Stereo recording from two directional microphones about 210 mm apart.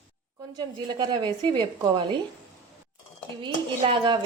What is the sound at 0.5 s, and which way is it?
Speech, 20° right (ahead or behind).